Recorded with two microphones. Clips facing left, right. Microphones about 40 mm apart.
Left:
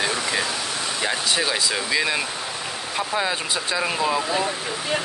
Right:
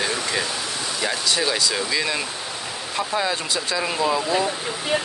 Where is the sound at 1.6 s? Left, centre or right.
Centre.